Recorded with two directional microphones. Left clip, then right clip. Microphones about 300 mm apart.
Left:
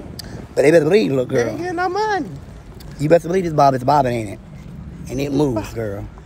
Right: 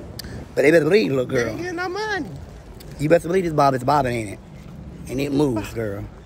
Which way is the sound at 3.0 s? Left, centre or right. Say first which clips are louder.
Left 3 dB; centre.